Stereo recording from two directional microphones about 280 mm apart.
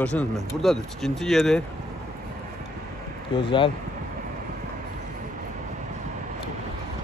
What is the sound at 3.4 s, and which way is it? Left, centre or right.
Speech, centre.